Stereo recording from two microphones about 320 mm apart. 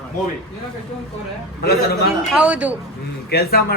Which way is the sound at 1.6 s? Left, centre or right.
Left.